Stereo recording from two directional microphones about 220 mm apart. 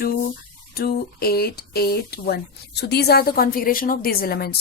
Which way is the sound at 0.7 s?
45° left (ahead or behind).